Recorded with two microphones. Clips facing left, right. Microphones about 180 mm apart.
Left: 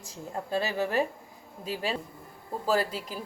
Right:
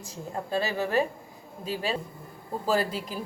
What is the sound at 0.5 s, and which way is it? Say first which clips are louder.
A woman's voice: right 1 dB; 15° left (ahead or behind).